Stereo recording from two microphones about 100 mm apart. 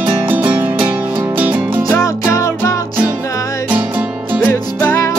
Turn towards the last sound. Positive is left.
turn(degrees=25)  # may be behind; listen again after turning